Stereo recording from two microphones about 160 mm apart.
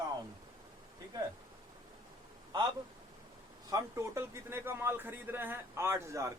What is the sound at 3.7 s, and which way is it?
A man's voice, 20° right (ahead or behind).